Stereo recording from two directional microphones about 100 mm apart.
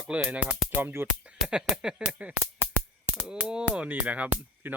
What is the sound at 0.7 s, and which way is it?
Music, 20° right (ahead or behind).